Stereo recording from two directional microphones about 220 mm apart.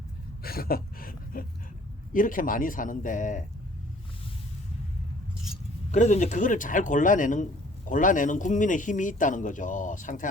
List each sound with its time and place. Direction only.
0.4 s a sound: 45° left (ahead or behind)
2.1 s speech: 40° left (ahead or behind)
5.9 s speech: 35° left (ahead or behind)